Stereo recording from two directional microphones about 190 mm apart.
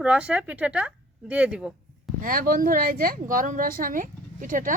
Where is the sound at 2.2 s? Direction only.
50° right (ahead or behind).